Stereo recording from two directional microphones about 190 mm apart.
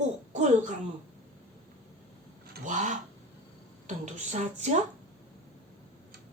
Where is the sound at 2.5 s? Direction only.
40° right (ahead or behind).